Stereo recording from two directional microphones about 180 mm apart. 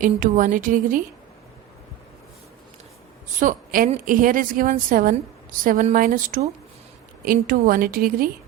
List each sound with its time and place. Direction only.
0.0 s a woman's voice: 50° right (ahead or behind)
3.4 s a woman's voice: 50° right (ahead or behind)